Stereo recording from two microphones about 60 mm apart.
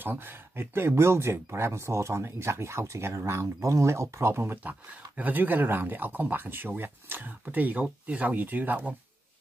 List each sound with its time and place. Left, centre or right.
0.0 s speech: right
4.6 s speech: right